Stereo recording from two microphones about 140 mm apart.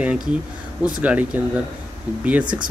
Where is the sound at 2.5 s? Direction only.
10° right (ahead or behind).